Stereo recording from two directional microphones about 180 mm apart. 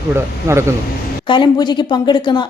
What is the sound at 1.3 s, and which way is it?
Speech, 25° left (ahead or behind).